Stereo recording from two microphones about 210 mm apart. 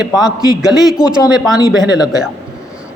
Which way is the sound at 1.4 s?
20° left (ahead or behind).